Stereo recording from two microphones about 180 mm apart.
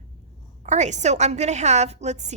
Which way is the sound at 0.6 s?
40° right (ahead or behind).